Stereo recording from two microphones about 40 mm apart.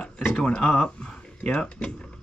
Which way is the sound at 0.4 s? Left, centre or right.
Left.